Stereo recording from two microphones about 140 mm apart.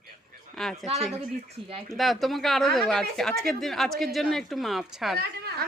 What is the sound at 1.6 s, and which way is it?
Speech, 35° right (ahead or behind).